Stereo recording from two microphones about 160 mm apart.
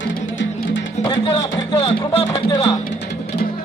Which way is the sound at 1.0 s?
25° left (ahead or behind).